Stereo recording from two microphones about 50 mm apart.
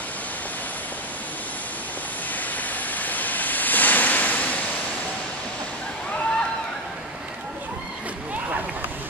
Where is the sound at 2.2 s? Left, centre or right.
Left.